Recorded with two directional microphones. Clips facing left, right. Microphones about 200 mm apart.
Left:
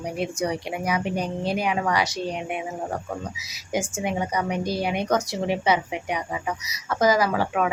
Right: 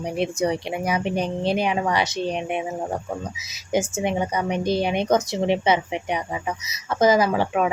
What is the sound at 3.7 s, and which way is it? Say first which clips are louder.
A woman's voice: right 4 dB; 25° right (ahead or behind).